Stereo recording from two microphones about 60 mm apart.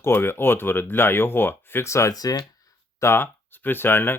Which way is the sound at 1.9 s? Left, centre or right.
Left.